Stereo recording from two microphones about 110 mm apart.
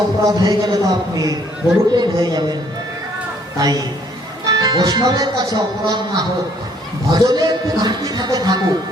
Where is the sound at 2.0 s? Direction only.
40° right (ahead or behind).